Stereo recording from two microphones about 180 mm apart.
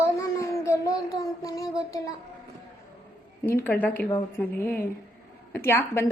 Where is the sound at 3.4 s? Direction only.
10° left (ahead or behind).